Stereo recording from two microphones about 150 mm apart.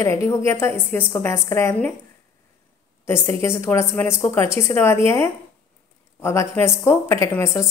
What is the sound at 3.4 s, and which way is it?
A woman's voice, 15° left (ahead or behind).